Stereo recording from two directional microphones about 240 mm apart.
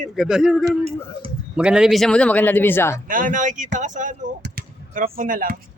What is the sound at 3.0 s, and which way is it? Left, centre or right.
Speech, right.